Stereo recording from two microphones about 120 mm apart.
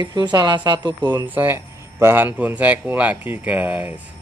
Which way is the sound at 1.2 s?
15° right (ahead or behind).